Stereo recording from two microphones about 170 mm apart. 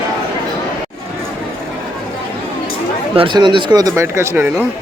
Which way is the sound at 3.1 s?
30° right (ahead or behind).